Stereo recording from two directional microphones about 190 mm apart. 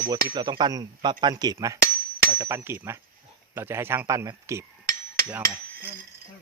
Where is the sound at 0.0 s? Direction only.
25° right (ahead or behind).